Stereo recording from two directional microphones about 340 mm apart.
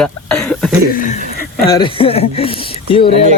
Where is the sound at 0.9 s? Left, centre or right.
Left.